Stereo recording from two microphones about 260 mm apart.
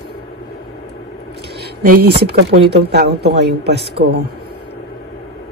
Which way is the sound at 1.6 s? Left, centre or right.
Right.